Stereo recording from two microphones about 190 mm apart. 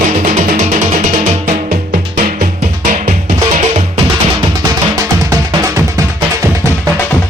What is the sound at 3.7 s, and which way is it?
Music, 30° right (ahead or behind).